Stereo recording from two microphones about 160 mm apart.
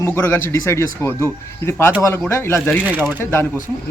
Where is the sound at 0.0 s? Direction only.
15° left (ahead or behind).